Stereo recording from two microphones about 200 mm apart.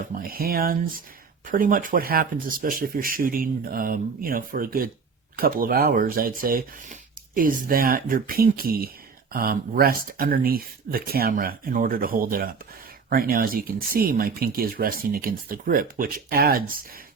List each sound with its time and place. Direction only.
0.0 s speech: 45° right (ahead or behind)